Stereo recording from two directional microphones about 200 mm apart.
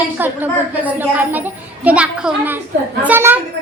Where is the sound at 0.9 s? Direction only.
10° right (ahead or behind).